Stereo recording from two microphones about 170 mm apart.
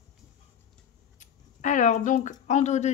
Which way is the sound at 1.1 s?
50° left (ahead or behind).